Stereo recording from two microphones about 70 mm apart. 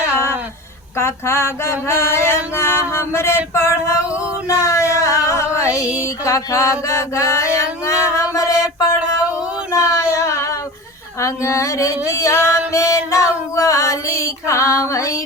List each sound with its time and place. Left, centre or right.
0.9 s female singing: left
4.4 s a sound: left
11.2 s music: left